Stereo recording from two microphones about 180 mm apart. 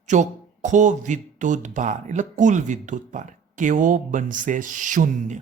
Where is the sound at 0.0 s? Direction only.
40° right (ahead or behind).